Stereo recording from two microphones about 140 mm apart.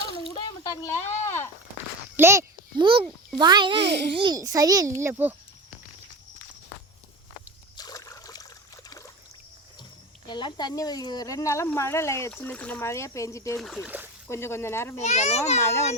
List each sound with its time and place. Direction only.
0.3 s a sound: 25° left (ahead or behind)
2.1 s a sound: 20° right (ahead or behind)
2.7 s a child's voice: 35° right (ahead or behind); by 5.3 s 15° right (ahead or behind)
7.8 s trickle: 25° left (ahead or behind)
10.2 s speech: 35° left (ahead or behind)
12.4 s speech: 10° left (ahead or behind)
13.6 s speech: centre (ahead or behind)
14.3 s speech: 20° left (ahead or behind)
15.0 s a child's voice: 55° left (ahead or behind)
15.6 s speech: 20° left (ahead or behind)